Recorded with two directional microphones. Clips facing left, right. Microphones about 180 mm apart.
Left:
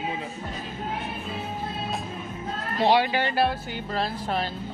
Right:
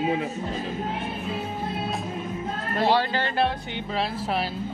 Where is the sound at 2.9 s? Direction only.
15° left (ahead or behind).